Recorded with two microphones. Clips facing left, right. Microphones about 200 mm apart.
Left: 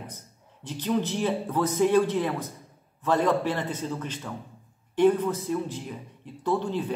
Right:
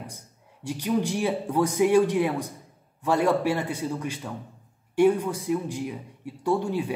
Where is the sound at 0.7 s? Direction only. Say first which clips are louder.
Right 1 dB; 10° right (ahead or behind).